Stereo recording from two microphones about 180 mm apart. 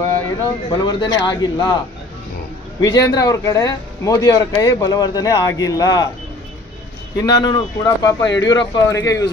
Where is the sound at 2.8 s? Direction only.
20° left (ahead or behind).